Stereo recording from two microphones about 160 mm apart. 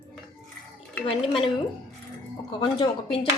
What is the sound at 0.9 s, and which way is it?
Speech, centre (ahead or behind).